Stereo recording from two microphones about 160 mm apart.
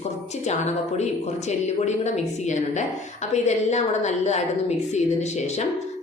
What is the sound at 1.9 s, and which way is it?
Speech, 45° left (ahead or behind).